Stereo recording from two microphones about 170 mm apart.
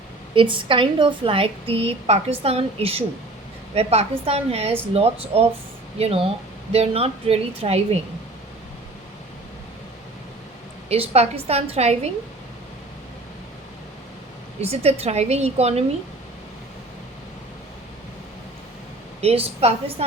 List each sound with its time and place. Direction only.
0.3 s a woman's voice: 30° right (ahead or behind)
10.8 s a woman's voice: 35° right (ahead or behind)
14.6 s a woman's voice: 35° right (ahead or behind)
19.2 s a woman's voice: 35° right (ahead or behind)